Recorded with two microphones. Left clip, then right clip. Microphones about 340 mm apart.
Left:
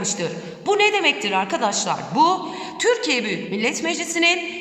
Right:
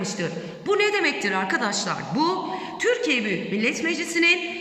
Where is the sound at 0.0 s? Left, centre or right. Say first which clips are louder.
Left 3 dB; centre.